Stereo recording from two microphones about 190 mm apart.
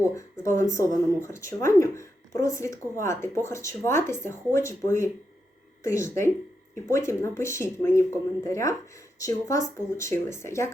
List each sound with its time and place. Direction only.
0.1 s speech: 15° left (ahead or behind)